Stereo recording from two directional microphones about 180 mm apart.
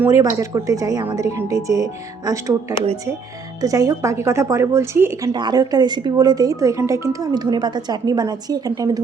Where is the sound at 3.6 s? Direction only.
20° right (ahead or behind).